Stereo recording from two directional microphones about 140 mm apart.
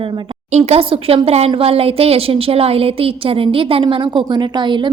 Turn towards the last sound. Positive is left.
turn(degrees=-35)  # may be behind; listen again after turning